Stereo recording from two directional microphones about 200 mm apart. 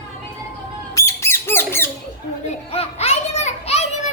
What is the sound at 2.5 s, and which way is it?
Children playing, 30° left (ahead or behind).